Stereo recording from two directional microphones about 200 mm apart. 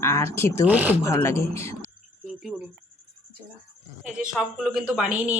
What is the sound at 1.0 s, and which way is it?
Speech, 15° left (ahead or behind).